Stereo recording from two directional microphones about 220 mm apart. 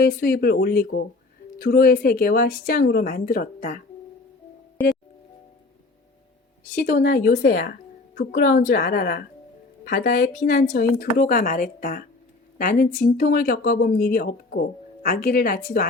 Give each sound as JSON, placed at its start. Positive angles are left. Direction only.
{"t": 0.0, "sound": "a woman's voice", "side_deg": 45}
{"t": 6.7, "sound": "a woman's voice", "side_deg": 40}